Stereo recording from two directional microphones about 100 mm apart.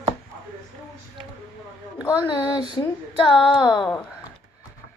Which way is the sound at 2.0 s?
45° left (ahead or behind).